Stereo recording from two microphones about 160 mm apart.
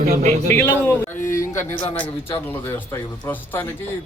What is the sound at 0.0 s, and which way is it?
Speech, 45° right (ahead or behind).